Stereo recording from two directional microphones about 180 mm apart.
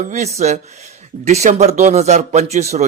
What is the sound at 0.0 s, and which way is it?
Speech, 40° right (ahead or behind).